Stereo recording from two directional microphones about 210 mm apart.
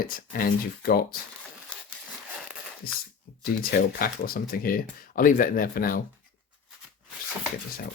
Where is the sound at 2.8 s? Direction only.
45° left (ahead or behind).